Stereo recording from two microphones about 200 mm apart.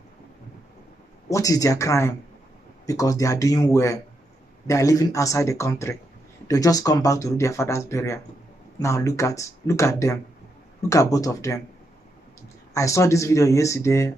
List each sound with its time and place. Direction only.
1.3 s speech: 15° left (ahead or behind)
12.7 s speech: 15° left (ahead or behind)